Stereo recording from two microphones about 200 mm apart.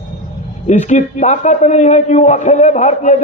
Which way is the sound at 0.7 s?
35° left (ahead or behind).